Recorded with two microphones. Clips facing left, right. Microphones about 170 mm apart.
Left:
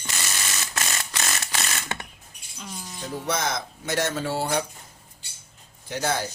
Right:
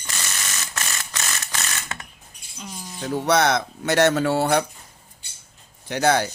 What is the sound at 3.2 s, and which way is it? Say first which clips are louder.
Speech: right 9 dB; 75° right (ahead or behind).